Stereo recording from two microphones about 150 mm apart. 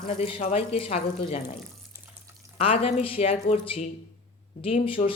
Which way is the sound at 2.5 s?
40° left (ahead or behind).